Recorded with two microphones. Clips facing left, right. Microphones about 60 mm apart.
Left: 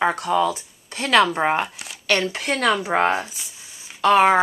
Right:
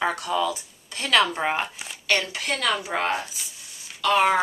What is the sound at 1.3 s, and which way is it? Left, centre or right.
Speech, centre.